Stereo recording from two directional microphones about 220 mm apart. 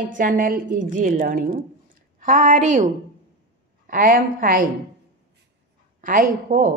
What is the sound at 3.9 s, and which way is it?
Speech, 40° right (ahead or behind).